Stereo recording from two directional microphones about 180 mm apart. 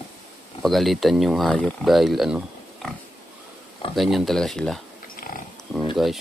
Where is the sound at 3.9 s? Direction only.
Centre (ahead or behind).